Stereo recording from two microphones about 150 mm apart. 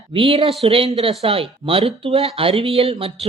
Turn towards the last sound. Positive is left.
turn(degrees=-40)  # may be behind; listen again after turning